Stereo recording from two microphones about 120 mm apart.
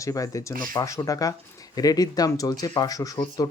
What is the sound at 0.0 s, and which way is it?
Speech, 30° left (ahead or behind).